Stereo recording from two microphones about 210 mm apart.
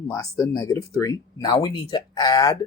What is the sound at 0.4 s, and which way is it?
Speech, 15° left (ahead or behind).